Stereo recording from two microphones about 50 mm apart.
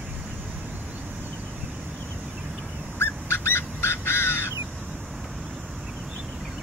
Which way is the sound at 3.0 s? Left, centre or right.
Left.